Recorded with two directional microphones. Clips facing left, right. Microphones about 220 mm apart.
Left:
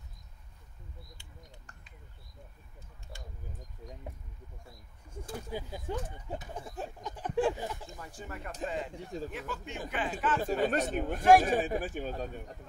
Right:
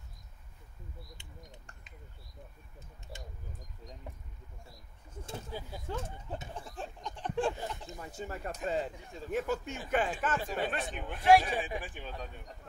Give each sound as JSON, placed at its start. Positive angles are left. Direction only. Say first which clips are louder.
{"t": 3.1, "sound": "speech", "louder": "right 2 dB", "side_deg": -20}
{"t": 5.5, "sound": "a sound", "louder": "left 4 dB", "side_deg": 15}
{"t": 7.8, "sound": "speech", "louder": "right 3 dB", "side_deg": -20}
{"t": 8.9, "sound": "speech", "louder": "left 7 dB", "side_deg": 35}
{"t": 9.3, "sound": "a man's voice", "louder": "right 7 dB", "side_deg": -45}
{"t": 10.4, "sound": "speech", "louder": "left 6 dB", "side_deg": 45}